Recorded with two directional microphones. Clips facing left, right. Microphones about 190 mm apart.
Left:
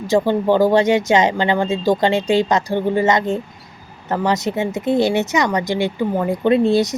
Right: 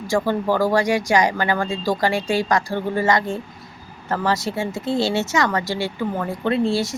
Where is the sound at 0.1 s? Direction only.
20° left (ahead or behind).